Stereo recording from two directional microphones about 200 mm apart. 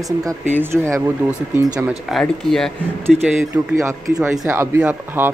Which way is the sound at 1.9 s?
Centre (ahead or behind).